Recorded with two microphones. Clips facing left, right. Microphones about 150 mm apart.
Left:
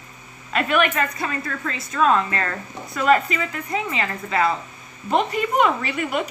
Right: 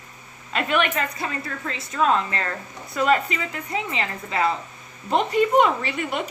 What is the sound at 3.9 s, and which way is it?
A woman's voice, 20° right (ahead or behind).